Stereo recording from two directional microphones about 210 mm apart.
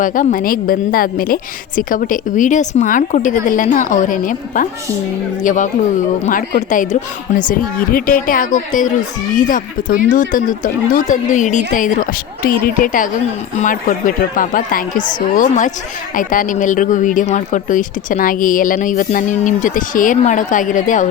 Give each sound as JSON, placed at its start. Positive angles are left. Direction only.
{"t": 0.0, "sound": "speech", "side_deg": 40}